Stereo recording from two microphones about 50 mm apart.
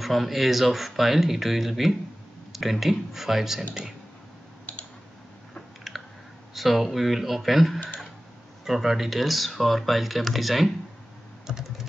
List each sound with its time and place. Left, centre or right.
0.0 s speech: centre
4.7 s typing: left
5.9 s typing: centre
6.5 s speech: centre